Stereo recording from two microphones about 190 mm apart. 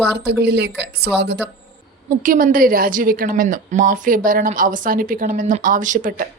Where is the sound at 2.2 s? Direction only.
45° right (ahead or behind).